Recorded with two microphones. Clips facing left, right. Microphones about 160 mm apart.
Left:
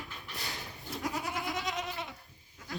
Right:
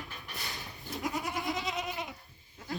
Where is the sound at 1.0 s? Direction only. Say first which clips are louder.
Right 1 dB; centre (ahead or behind).